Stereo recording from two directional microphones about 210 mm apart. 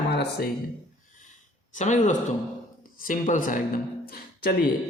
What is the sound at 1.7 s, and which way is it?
Speech, 35° left (ahead or behind).